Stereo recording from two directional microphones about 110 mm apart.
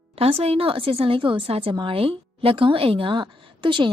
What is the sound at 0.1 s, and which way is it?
A woman's voice, 65° right (ahead or behind).